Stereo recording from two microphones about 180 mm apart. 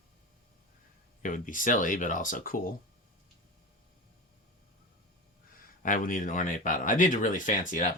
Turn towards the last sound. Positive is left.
turn(degrees=45)  # may be behind; listen again after turning